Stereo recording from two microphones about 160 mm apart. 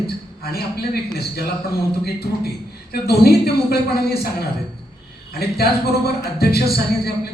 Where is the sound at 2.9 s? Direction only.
80° left.